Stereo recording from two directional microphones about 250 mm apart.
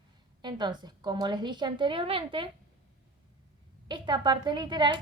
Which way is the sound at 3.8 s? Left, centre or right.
Centre.